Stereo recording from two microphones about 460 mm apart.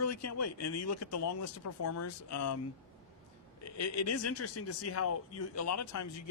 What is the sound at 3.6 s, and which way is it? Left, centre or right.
A man's voice, left.